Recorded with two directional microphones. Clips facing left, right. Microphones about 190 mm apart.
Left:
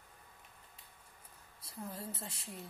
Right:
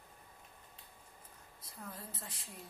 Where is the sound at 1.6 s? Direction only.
30° left (ahead or behind).